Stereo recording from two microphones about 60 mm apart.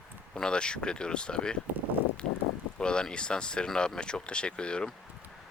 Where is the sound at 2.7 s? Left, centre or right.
Centre.